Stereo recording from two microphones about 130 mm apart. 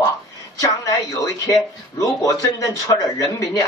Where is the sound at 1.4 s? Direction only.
25° left (ahead or behind).